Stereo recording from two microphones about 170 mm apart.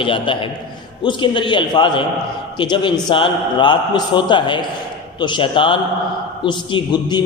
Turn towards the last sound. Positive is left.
turn(degrees=25)  # may be behind; listen again after turning